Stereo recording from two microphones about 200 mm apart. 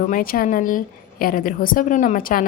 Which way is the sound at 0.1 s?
45° left (ahead or behind).